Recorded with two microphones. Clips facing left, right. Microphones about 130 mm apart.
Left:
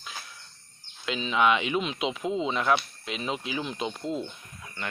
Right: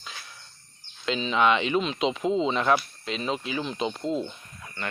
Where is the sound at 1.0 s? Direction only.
5° left (ahead or behind).